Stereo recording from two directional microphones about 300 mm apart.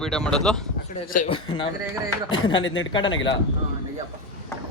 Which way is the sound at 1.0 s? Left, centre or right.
Left.